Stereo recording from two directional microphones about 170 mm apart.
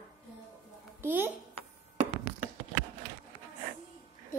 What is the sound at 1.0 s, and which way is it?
Speech, 10° right (ahead or behind).